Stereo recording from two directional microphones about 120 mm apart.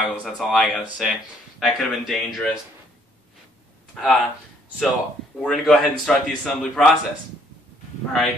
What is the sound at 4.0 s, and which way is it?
Speech, centre (ahead or behind).